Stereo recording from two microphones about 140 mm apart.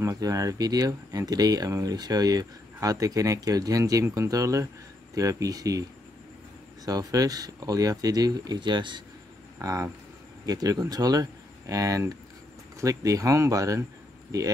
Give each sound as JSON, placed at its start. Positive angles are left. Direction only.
{"t": 0.0, "sound": "speech", "side_deg": -25}
{"t": 6.9, "sound": "speech", "side_deg": -25}
{"t": 9.6, "sound": "speech", "side_deg": -25}